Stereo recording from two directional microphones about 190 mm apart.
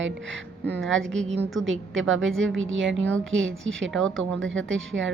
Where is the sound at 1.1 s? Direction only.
75° right (ahead or behind).